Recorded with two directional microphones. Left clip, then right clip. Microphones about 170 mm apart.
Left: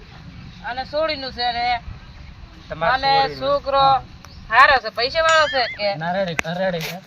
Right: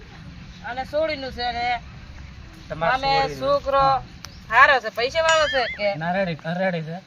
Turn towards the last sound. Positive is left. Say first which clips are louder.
# left 3 dB
turn(degrees=0)  # may be behind; listen again after turning